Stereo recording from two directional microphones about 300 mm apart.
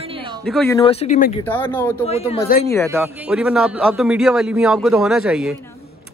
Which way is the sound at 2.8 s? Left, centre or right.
Centre.